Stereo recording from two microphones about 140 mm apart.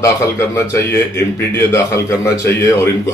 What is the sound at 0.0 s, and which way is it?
A man's voice, 20° left (ahead or behind).